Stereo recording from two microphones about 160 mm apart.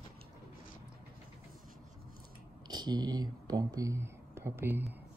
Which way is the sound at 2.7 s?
25° right (ahead or behind).